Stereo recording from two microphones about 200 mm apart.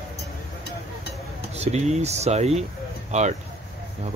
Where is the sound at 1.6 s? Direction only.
35° right (ahead or behind).